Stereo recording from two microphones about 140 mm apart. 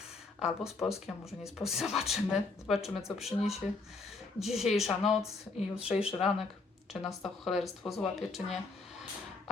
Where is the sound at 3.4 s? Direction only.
50° left (ahead or behind).